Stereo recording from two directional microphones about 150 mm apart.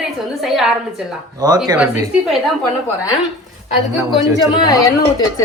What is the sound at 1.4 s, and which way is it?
Speech, 25° right (ahead or behind).